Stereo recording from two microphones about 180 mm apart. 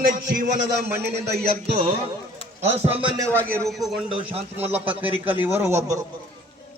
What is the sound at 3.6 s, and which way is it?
Speech, centre (ahead or behind).